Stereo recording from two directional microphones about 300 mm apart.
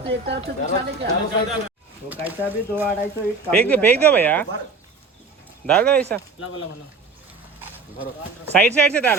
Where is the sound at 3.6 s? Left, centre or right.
Centre.